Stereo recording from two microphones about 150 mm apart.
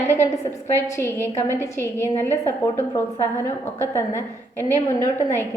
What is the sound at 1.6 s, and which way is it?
Speech, 20° left (ahead or behind).